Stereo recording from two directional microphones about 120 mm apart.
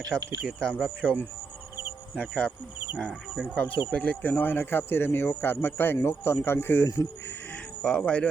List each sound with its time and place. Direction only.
0.4 s speech: 5° left (ahead or behind)
3.0 s speech: centre (ahead or behind)
3.9 s speech: 10° left (ahead or behind); by 7.1 s 25° left (ahead or behind)
7.3 s a sound: 10° left (ahead or behind)